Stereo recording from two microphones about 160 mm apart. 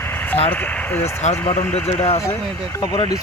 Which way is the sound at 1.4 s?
35° left (ahead or behind).